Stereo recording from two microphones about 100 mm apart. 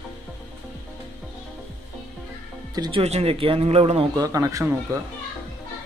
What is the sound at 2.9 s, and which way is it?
A man's voice, 90° right.